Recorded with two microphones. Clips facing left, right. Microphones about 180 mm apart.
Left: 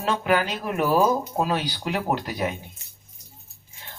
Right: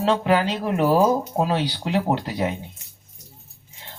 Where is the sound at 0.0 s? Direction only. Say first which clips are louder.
Right 3 dB; 25° right (ahead or behind).